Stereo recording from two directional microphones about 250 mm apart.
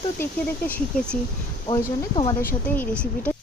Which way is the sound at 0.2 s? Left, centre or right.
Centre.